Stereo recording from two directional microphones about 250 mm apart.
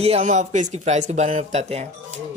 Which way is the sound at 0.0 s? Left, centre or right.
Right.